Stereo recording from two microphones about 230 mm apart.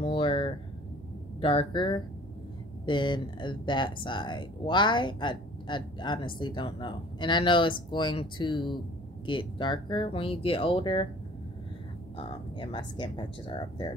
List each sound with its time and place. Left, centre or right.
0.0 s a sound: left
1.4 s speech: left
12.2 s speech: left